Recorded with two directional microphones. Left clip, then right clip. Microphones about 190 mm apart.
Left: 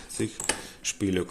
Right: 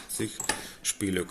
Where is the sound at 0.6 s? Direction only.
25° left (ahead or behind).